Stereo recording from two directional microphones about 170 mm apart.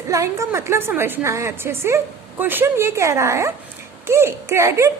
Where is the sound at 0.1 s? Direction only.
20° right (ahead or behind).